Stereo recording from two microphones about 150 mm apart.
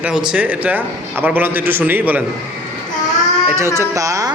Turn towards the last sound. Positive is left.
turn(degrees=-20)  # may be behind; listen again after turning